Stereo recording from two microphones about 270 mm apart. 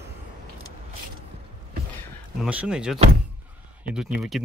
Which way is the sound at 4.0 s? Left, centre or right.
Centre.